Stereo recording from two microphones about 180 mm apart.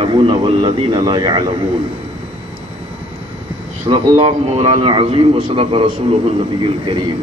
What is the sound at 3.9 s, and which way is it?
Speech, 20° right (ahead or behind).